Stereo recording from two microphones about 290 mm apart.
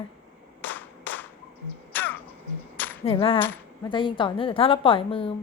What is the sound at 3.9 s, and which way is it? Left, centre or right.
A woman's voice, centre.